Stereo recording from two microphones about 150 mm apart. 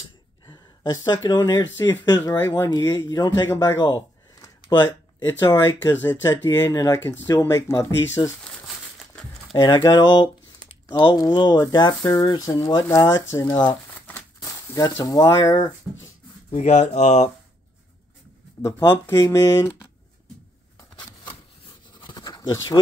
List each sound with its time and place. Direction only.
0.5 s speech: 25° left (ahead or behind)
3.4 s a sound: 20° left (ahead or behind)
4.8 s speech: 15° left (ahead or behind)
9.5 s speech: 30° left (ahead or behind)
13.5 s speech: 35° left (ahead or behind)
14.4 s a sound: 20° left (ahead or behind)
16.5 s speech: 50° left (ahead or behind)
18.6 s speech: 20° left (ahead or behind)
20.9 s a sound: 30° left (ahead or behind)